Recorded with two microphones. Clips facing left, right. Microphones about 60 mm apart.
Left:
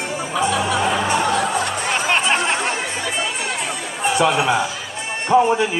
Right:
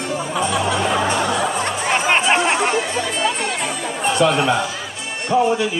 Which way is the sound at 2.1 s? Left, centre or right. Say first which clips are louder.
Right 2 dB; right.